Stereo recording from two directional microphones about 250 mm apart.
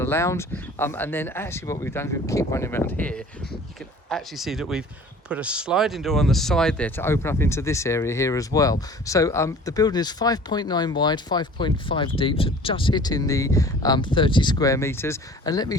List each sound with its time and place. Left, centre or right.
0.0 s speech: centre